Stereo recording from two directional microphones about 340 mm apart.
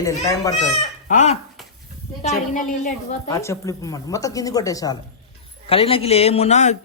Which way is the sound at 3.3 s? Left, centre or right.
Centre.